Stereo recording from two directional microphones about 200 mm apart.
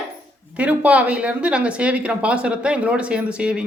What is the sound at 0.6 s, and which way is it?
Singing, 5° right (ahead or behind).